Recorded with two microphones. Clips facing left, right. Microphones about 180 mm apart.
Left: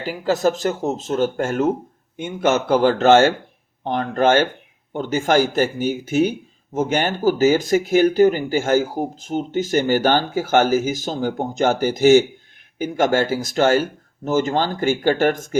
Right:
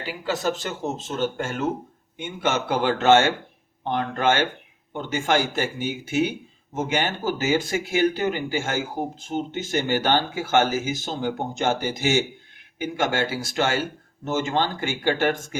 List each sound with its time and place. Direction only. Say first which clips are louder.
0.0 s speech: left 7 dB; 45° left (ahead or behind)